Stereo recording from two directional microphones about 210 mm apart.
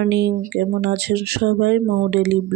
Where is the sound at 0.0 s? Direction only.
50° right (ahead or behind).